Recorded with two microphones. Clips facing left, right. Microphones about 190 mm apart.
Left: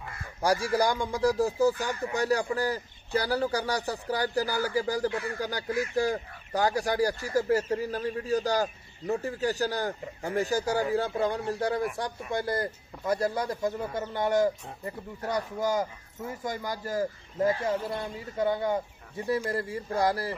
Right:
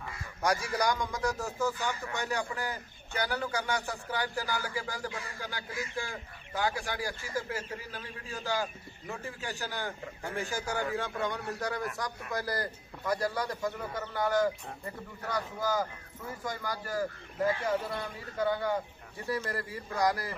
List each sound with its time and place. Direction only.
0.4 s speech: 30° left (ahead or behind)
5.1 s speech: 60° left (ahead or behind)
5.4 s a man's voice: 40° left (ahead or behind)